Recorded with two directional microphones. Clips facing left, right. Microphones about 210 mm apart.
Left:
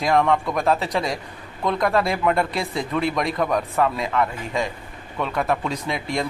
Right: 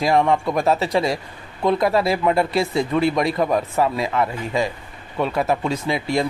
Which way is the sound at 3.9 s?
5° right (ahead or behind).